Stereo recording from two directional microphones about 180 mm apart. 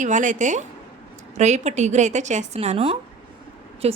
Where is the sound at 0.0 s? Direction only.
45° right (ahead or behind).